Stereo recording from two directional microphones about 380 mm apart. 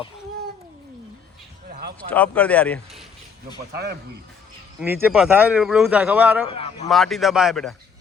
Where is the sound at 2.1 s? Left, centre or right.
Centre.